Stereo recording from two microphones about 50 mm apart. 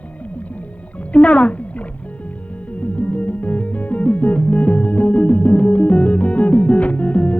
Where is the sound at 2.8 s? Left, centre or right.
Left.